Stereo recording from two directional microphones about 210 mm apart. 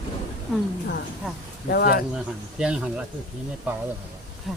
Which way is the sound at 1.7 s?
50° left (ahead or behind).